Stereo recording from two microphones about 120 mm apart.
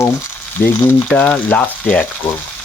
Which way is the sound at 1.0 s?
10° left (ahead or behind).